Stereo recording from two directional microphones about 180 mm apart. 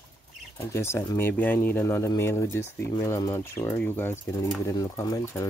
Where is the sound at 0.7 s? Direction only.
15° left (ahead or behind).